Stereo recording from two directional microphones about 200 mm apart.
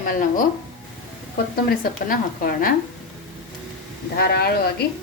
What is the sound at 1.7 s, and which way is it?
A woman's voice, 45° left (ahead or behind).